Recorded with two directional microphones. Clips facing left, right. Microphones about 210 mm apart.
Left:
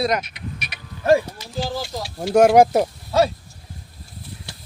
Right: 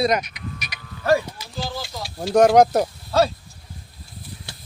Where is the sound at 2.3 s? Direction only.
5° left (ahead or behind).